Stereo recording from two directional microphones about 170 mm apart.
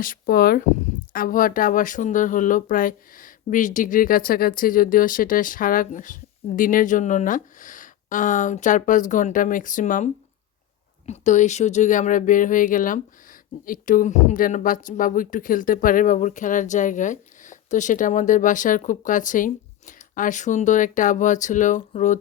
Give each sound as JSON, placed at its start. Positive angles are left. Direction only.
{"t": 0.0, "sound": "speech", "side_deg": 60}